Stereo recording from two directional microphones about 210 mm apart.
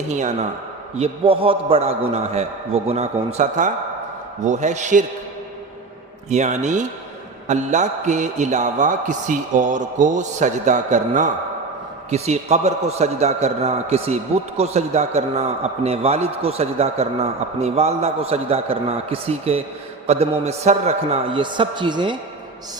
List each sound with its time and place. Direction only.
0.1 s a man's voice: 35° right (ahead or behind)
6.3 s a man's voice: 35° right (ahead or behind)